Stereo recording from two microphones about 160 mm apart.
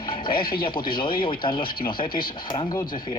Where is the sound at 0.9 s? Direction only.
30° left (ahead or behind).